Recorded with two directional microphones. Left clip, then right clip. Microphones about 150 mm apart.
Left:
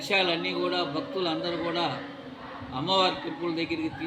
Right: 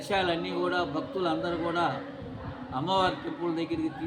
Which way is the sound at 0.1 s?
15° right (ahead or behind).